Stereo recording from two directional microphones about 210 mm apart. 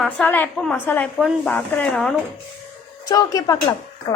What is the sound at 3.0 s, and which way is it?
Speech, 15° left (ahead or behind).